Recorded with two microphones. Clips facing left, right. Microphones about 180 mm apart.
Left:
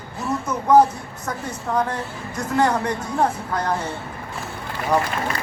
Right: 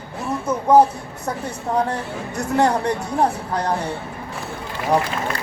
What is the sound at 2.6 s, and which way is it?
Speech, 35° right (ahead or behind).